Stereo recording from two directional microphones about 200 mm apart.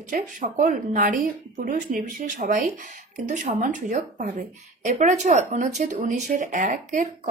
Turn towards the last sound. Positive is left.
turn(degrees=-40)  # may be behind; listen again after turning